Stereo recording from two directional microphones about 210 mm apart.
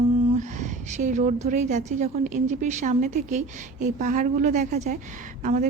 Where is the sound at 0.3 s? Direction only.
35° right (ahead or behind).